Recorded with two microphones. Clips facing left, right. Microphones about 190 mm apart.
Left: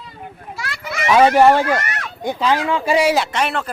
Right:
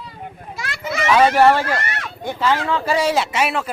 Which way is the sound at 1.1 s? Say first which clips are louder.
Left 2 dB; 20° left (ahead or behind).